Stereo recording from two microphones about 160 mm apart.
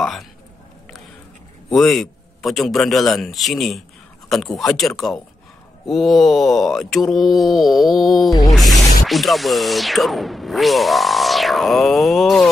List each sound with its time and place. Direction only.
0.0 s speech: centre (ahead or behind)
1.7 s speech: centre (ahead or behind)
8.3 s a sound: 25° left (ahead or behind)
8.7 s speech: centre (ahead or behind)